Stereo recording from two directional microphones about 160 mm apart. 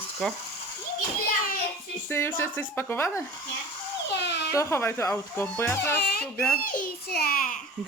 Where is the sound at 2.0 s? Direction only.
15° left (ahead or behind).